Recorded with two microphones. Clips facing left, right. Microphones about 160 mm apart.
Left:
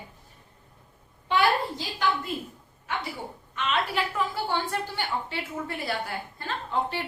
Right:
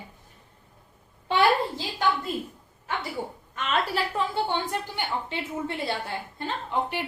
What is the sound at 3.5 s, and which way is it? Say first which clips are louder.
Speech: right 1 dB; 40° right (ahead or behind).